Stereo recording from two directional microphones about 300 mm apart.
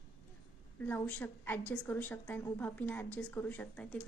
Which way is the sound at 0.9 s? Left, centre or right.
Centre.